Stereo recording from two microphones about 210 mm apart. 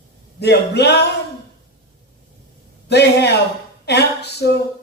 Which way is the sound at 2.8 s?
50° left (ahead or behind).